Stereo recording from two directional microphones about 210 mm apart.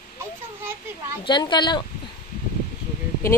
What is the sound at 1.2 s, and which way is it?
Speech, 20° left (ahead or behind).